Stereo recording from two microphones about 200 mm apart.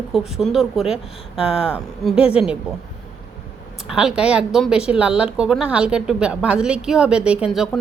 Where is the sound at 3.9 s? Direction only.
5° right (ahead or behind).